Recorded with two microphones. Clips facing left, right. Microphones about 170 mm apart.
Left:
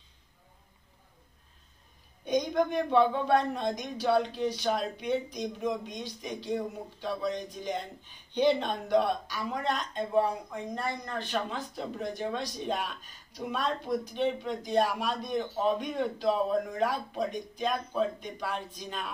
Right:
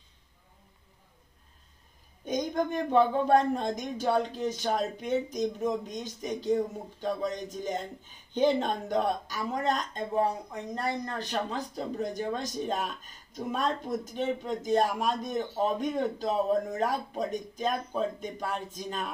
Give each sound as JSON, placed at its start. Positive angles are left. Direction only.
{"t": 2.2, "sound": "speech", "side_deg": -45}